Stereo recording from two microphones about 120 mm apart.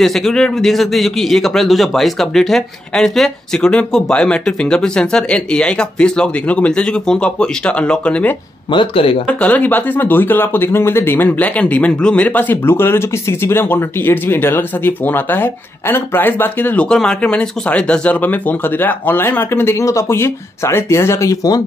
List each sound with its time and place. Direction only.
0.0 s speech: 5° left (ahead or behind)
8.7 s speech: 50° left (ahead or behind)
9.3 s speech: 10° left (ahead or behind); by 21.6 s 30° left (ahead or behind)